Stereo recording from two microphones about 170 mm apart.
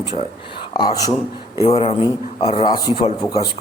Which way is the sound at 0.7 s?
25° left (ahead or behind).